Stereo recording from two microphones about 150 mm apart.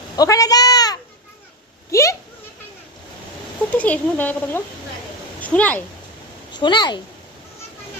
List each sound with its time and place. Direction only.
0.2 s a man's voice: 25° left (ahead or behind)
1.9 s a sound: 20° left (ahead or behind)
3.8 s speech: 10° left (ahead or behind)
6.5 s speech: 30° left (ahead or behind)